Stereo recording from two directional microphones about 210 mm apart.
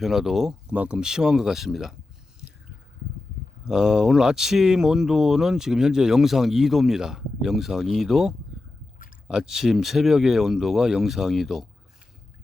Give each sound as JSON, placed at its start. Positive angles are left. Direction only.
{"t": 0.0, "sound": "speech", "side_deg": 0}
{"t": 3.7, "sound": "speech", "side_deg": 0}